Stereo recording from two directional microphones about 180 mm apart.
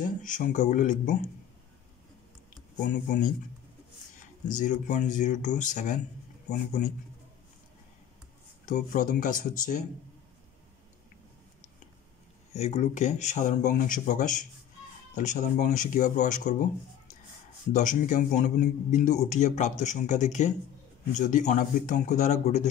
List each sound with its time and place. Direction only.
0.0 s speech: 45° left (ahead or behind)
2.9 s a man's voice: 45° left (ahead or behind)
4.5 s a man's voice: 45° left (ahead or behind)
8.6 s a man's voice: 45° left (ahead or behind)
12.5 s a man's voice: 40° left (ahead or behind)
17.7 s a man's voice: 45° left (ahead or behind)